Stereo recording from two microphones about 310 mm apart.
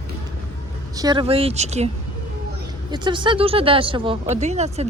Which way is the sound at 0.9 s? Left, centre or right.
Centre.